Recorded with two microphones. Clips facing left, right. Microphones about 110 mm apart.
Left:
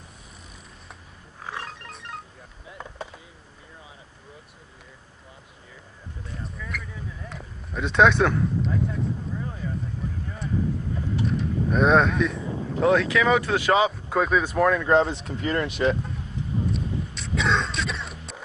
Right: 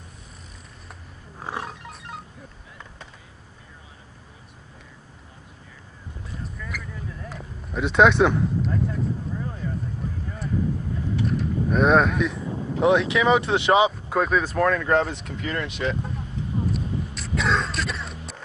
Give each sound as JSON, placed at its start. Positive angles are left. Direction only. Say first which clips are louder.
{"t": 1.4, "sound": "music", "louder": "right 3 dB", "side_deg": -30}
{"t": 6.4, "sound": "a sound", "louder": "even", "side_deg": 0}
{"t": 11.2, "sound": "a sound", "louder": "right 1 dB", "side_deg": 0}
{"t": 12.8, "sound": "speech", "louder": "right 1 dB", "side_deg": -25}
{"t": 13.8, "sound": "speech", "louder": "right 1 dB", "side_deg": 0}
{"t": 15.0, "sound": "speech", "louder": "left 2 dB", "side_deg": 25}
{"t": 16.7, "sound": "throat clearing", "louder": "right 1 dB", "side_deg": 0}